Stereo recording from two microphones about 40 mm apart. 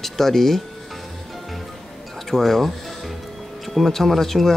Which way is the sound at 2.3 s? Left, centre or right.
Centre.